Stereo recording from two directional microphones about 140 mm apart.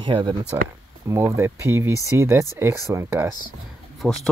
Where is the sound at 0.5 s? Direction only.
20° right (ahead or behind).